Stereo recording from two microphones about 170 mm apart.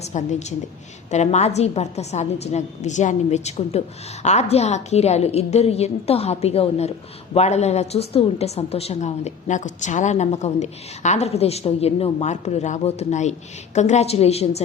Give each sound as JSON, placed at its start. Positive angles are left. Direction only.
{"t": 0.0, "sound": "a woman's voice", "side_deg": 45}